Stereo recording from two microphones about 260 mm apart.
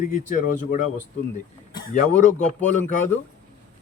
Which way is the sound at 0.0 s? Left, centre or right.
Left.